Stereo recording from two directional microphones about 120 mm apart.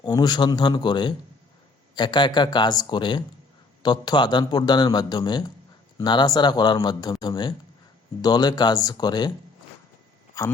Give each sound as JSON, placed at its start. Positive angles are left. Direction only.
{"t": 0.0, "sound": "a man's voice", "side_deg": 35}